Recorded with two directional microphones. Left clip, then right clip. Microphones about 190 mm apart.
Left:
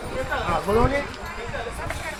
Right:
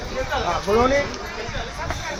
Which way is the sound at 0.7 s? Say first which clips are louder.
Right 3 dB; 15° right (ahead or behind).